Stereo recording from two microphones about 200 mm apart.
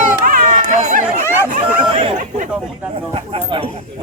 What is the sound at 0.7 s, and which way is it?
Speech, 35° right (ahead or behind).